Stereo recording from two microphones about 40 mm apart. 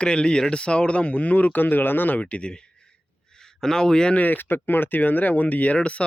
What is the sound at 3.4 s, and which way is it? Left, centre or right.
Speech, centre.